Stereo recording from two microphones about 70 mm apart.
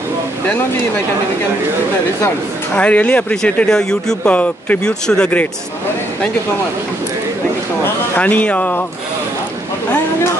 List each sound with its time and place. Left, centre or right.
2.7 s speech: centre
4.2 s speech: left
5.0 s speech: centre
8.2 s speech: left